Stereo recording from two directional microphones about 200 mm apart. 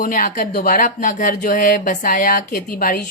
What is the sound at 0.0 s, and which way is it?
A woman's voice, 40° left (ahead or behind).